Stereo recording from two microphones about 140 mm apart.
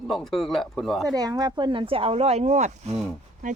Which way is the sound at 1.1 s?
25° right (ahead or behind).